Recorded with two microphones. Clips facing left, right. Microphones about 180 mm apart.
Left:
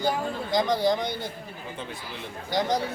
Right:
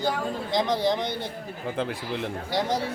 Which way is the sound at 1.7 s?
90° right.